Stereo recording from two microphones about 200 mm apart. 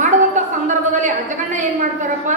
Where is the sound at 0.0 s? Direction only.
40° right (ahead or behind).